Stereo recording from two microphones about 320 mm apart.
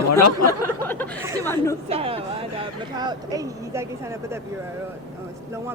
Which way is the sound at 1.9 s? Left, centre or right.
Centre.